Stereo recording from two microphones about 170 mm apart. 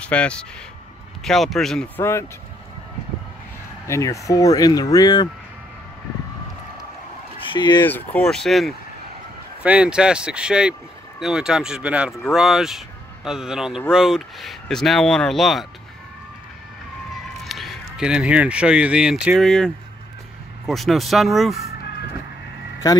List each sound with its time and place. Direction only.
0.0 s speech: 5° left (ahead or behind)
2.0 s speech: 15° left (ahead or behind)
3.8 s speech: 15° left (ahead or behind)
7.5 s speech: 25° left (ahead or behind)
7.8 s speech: 10° left (ahead or behind)
17.5 s speech: centre (ahead or behind)